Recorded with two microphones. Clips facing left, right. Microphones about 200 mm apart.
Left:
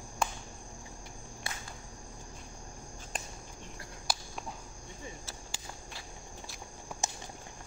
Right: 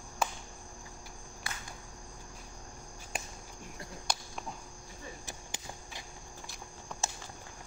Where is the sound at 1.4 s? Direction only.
25° left (ahead or behind).